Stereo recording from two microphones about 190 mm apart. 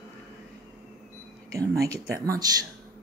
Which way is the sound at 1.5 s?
15° right (ahead or behind).